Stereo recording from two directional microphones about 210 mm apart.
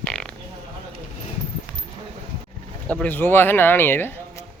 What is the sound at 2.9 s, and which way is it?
Speech, 10° left (ahead or behind).